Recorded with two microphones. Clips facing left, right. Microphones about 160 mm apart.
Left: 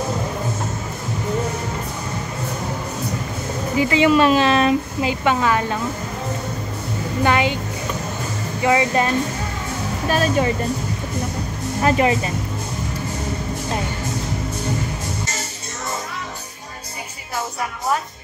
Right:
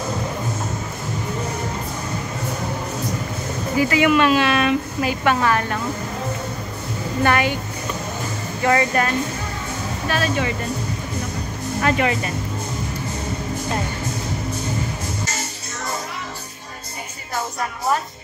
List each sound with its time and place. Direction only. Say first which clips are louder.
3.7 s speech: left 1 dB; 20° left (ahead or behind)
5.0 s a woman's voice: right 1 dB; 15° left (ahead or behind)
7.2 s speech: left 1 dB; 20° left (ahead or behind)
8.6 s a woman's voice: left 1 dB; 15° left (ahead or behind)
10.0 s speech: left 4 dB; 40° left (ahead or behind)
11.8 s speech: left 3 dB; 30° left (ahead or behind)